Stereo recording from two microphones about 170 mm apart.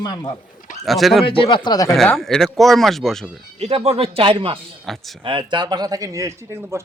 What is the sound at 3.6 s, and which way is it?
Speech, 35° right (ahead or behind).